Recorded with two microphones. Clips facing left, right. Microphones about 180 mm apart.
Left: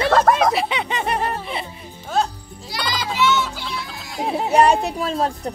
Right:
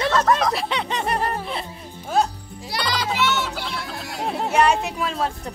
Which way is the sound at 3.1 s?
65° right (ahead or behind).